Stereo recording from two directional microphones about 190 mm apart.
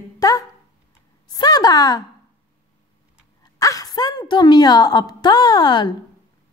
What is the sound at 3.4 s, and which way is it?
A woman's voice, 20° left (ahead or behind).